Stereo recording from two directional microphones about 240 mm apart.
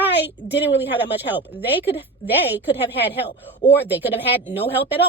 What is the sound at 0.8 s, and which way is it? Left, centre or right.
A woman's voice, centre.